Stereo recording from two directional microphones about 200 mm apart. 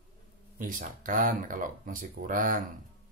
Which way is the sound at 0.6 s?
40° right (ahead or behind).